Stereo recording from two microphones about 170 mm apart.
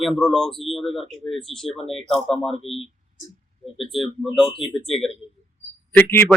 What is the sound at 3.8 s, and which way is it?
A man's voice, centre (ahead or behind).